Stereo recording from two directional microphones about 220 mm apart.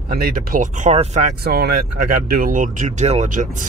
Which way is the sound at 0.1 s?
40° right (ahead or behind).